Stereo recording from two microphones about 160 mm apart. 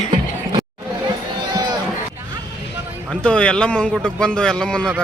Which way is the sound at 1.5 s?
25° right (ahead or behind).